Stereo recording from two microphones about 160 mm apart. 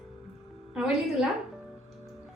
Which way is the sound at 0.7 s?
5° right (ahead or behind).